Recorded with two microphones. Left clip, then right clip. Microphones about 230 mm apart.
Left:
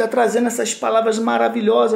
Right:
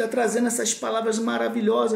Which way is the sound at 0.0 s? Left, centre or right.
Centre.